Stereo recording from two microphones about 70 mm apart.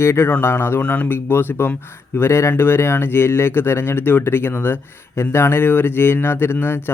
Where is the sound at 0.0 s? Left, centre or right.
Left.